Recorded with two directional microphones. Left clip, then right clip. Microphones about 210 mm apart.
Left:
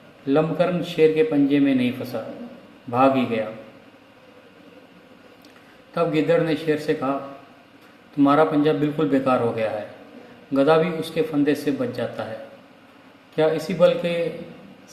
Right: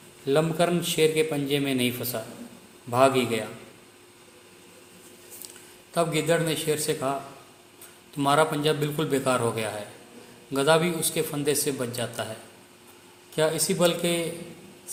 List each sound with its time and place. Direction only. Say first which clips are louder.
0.3 s a man's voice: left 3 dB; 45° right (ahead or behind)
2.9 s a man's voice: left 2 dB; 45° right (ahead or behind)
5.9 s a man's voice: left 4 dB; 45° right (ahead or behind)
8.2 s a man's voice: left 5 dB; 45° right (ahead or behind)
13.3 s a man's voice: left 4 dB; 45° right (ahead or behind)